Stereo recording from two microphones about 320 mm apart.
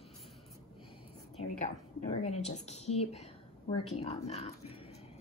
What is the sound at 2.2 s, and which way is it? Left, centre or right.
A woman's voice, centre.